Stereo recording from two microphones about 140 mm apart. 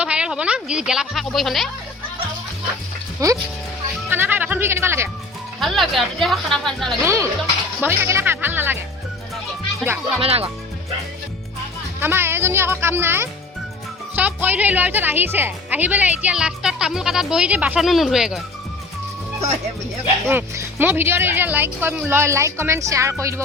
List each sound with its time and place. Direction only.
0.0 s speech: 5° right (ahead or behind)
3.2 s speech: 25° right (ahead or behind)
5.5 s speech: centre (ahead or behind)
7.0 s a woman's voice: 20° right (ahead or behind)
10.2 s speech: 45° right (ahead or behind)
11.9 s a woman's voice: 15° right (ahead or behind)
20.2 s a woman's voice: 15° right (ahead or behind)